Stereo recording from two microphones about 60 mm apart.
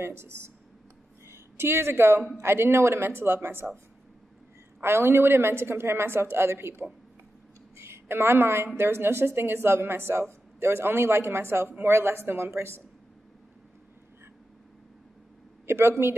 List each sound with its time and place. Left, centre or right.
0.0 s a woman's voice: right
4.8 s a woman's voice: right
7.7 s a sound: right
8.7 s a woman's voice: right
15.6 s speech: right